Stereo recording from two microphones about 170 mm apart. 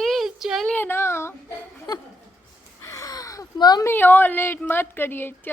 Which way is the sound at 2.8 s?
20° left (ahead or behind).